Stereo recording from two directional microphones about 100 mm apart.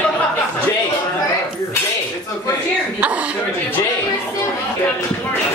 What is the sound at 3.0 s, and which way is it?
Speech, 15° right (ahead or behind).